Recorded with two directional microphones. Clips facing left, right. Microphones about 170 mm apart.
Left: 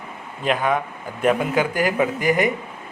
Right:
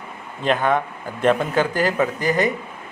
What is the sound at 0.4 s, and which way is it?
Speech, 5° left (ahead or behind).